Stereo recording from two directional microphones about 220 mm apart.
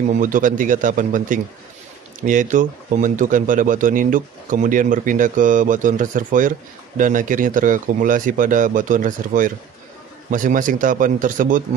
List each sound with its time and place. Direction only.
0.2 s speech: 35° right (ahead or behind)